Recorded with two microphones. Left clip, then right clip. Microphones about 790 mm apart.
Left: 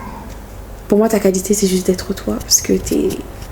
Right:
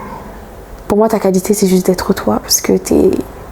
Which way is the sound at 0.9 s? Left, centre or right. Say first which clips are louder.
Right 2 dB; right.